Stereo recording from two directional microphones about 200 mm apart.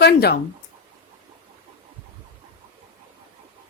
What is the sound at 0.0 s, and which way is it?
Speech, 55° left (ahead or behind).